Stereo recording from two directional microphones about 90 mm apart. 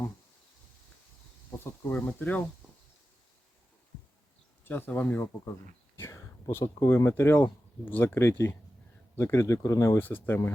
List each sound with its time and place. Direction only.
1.5 s insect: 25° left (ahead or behind)
2.0 s speech: 15° left (ahead or behind)
4.6 s speech: 25° left (ahead or behind)
6.0 s speech: 35° left (ahead or behind)
10.0 s speech: 20° left (ahead or behind)